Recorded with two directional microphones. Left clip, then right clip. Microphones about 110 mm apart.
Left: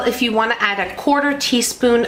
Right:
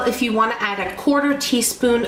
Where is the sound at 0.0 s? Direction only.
40° left (ahead or behind).